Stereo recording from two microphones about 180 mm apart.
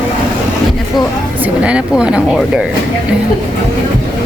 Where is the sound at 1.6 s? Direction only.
5° right (ahead or behind).